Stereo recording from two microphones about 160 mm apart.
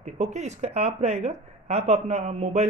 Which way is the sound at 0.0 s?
45° right (ahead or behind).